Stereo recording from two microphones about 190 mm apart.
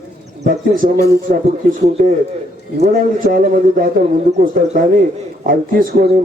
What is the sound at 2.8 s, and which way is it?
A man's voice, 50° right (ahead or behind).